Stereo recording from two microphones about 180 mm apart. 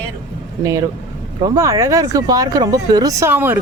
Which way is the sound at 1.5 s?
20° right (ahead or behind).